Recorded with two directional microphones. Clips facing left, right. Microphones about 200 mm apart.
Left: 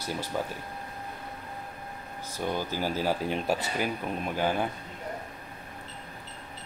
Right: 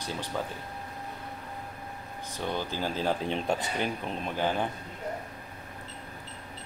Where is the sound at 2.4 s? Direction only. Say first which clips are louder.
Left 2 dB; 10° left (ahead or behind).